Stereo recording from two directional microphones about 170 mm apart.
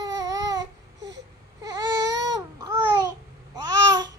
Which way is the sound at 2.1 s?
90° right.